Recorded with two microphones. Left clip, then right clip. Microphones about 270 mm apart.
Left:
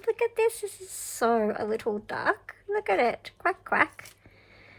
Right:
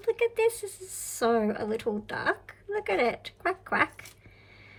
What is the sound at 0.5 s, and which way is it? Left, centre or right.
Speech, centre.